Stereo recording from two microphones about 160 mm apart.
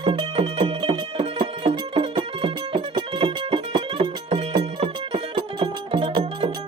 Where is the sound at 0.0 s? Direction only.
35° right (ahead or behind).